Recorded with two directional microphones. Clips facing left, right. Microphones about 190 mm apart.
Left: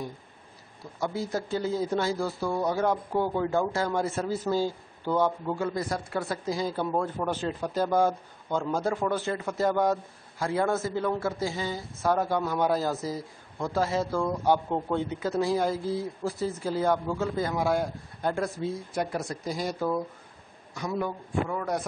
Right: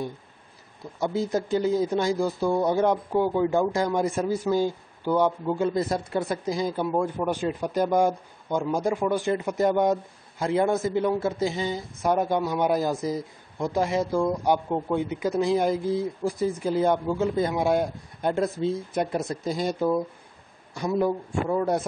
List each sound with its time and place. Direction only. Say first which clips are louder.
0.9 s a man's voice: right 5 dB; 20° right (ahead or behind)
21.0 s a man's voice: right 4 dB; 30° right (ahead or behind)